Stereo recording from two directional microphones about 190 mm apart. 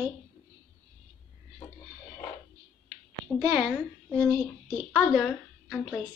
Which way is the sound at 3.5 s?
Centre (ahead or behind).